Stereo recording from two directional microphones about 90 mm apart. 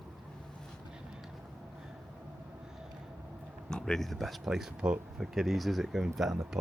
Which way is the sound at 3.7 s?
5° left (ahead or behind).